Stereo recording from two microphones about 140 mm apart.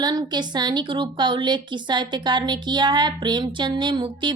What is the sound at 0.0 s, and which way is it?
A woman's voice, 30° right (ahead or behind).